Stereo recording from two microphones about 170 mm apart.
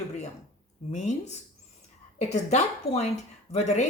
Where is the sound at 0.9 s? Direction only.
45° left (ahead or behind).